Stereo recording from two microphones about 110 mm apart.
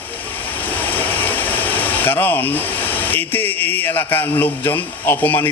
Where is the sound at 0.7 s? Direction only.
15° left (ahead or behind).